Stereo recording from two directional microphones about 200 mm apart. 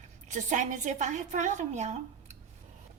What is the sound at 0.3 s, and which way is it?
A woman's voice, 40° right (ahead or behind).